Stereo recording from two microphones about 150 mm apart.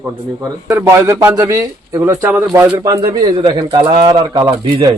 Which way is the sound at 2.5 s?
15° right (ahead or behind).